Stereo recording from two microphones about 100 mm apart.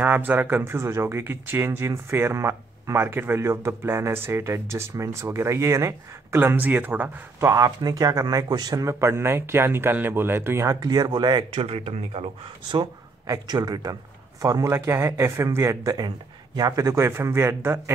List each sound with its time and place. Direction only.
0.0 s speech: 20° right (ahead or behind); by 11.4 s 50° right (ahead or behind)
11.5 s speech: 80° right
13.3 s speech: 40° right (ahead or behind)
14.4 s speech: 30° right (ahead or behind)